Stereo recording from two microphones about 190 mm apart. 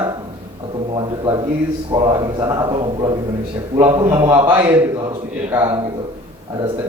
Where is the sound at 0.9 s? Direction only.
25° right (ahead or behind).